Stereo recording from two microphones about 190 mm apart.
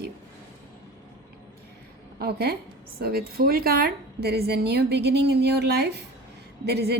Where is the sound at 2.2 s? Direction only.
55° right (ahead or behind).